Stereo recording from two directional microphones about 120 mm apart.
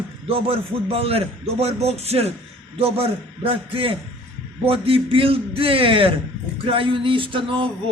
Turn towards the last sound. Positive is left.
turn(degrees=-45)  # may be behind; listen again after turning